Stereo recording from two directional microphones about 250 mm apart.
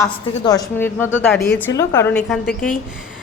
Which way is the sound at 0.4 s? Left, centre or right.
Centre.